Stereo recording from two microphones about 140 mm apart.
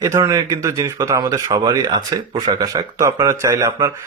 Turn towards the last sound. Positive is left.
turn(degrees=-25)  # may be behind; listen again after turning